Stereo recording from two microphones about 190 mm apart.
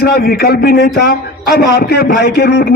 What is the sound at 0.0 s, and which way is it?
A man's voice, 55° left (ahead or behind).